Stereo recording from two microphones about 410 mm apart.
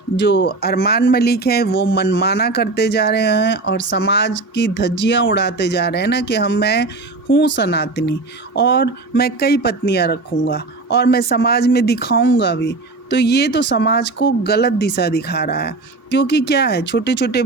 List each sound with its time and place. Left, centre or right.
0.2 s speech: left